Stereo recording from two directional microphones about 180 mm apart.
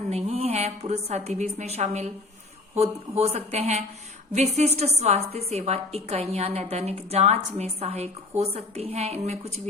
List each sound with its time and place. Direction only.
0.1 s a woman's voice: 35° right (ahead or behind)